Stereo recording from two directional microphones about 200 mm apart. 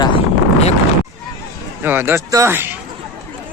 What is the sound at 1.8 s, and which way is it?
Speech, 10° right (ahead or behind).